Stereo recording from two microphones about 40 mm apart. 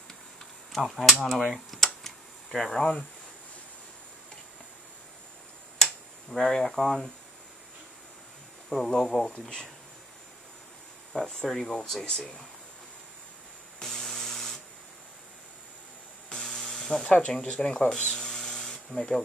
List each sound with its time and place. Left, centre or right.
0.7 s a sound: centre
6.3 s speech: centre
8.6 s speech: centre
11.1 s speech: centre
13.8 s a sound: centre
16.3 s electric toothbrush: left
17.5 s speech: left
18.0 s electric toothbrush: centre
18.9 s speech: left